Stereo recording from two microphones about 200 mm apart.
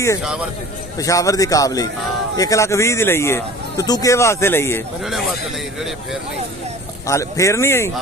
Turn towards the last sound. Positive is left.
turn(degrees=15)  # may be behind; listen again after turning